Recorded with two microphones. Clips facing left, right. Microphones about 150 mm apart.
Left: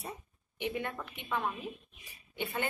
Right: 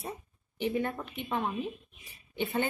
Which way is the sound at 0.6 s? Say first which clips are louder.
Right 5 dB; 35° right (ahead or behind).